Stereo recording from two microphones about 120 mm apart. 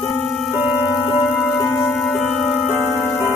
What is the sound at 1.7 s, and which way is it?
Music, 5° left (ahead or behind).